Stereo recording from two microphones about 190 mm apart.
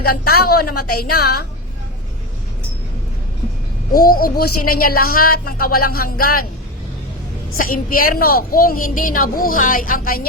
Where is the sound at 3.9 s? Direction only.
50° left (ahead or behind).